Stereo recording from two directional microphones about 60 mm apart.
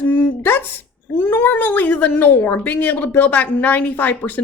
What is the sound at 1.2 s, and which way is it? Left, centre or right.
Speech, left.